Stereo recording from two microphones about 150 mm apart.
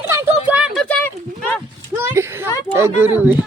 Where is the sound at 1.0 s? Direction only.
10° left (ahead or behind).